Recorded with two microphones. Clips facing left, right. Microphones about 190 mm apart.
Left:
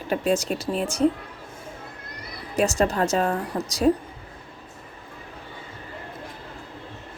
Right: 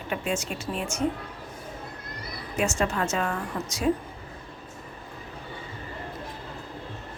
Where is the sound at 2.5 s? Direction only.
35° left (ahead or behind).